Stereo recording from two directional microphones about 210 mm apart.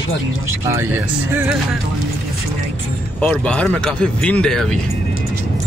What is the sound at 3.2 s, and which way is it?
Speech, 5° left (ahead or behind).